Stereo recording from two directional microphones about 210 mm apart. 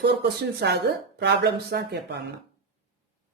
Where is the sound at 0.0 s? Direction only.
50° right (ahead or behind).